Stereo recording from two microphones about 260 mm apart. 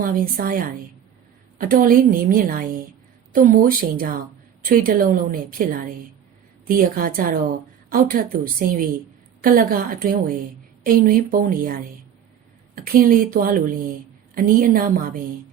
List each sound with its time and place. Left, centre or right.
0.0 s a woman's voice: right